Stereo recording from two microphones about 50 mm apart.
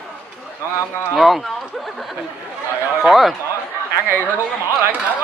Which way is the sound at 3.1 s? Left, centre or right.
Centre.